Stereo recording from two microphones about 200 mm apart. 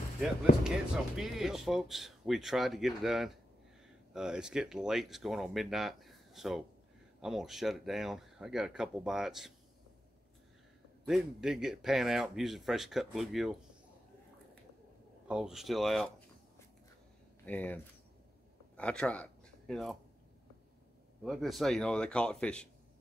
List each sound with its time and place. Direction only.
0.7 s speech: centre (ahead or behind)
11.1 s speech: centre (ahead or behind)
15.2 s speech: 5° right (ahead or behind)
17.5 s speech: 10° left (ahead or behind)
21.2 s speech: centre (ahead or behind)